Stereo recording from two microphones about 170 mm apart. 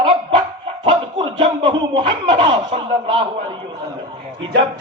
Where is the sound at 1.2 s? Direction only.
30° right (ahead or behind).